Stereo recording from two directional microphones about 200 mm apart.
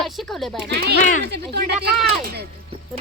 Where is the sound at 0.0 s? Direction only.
Centre (ahead or behind).